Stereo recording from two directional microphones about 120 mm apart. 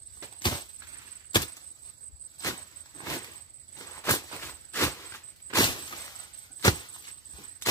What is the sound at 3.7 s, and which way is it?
Walk, 25° left (ahead or behind).